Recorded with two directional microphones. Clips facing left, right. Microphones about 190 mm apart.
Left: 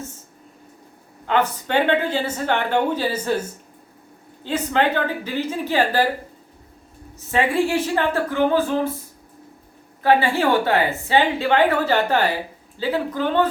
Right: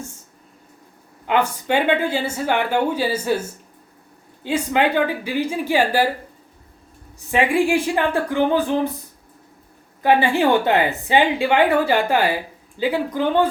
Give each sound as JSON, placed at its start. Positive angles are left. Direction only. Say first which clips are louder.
{"t": 1.3, "sound": "a woman's voice", "louder": "right 1 dB", "side_deg": -10}
{"t": 4.4, "sound": "a woman's voice", "louder": "right 1 dB", "side_deg": -10}
{"t": 7.3, "sound": "a woman's voice", "louder": "right 2 dB", "side_deg": -15}
{"t": 10.0, "sound": "a woman's voice", "louder": "right 1 dB", "side_deg": -15}